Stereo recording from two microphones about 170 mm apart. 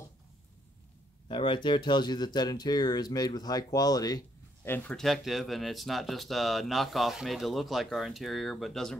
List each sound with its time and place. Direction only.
1.3 s speech: 30° left (ahead or behind)
4.6 s speech: 10° left (ahead or behind)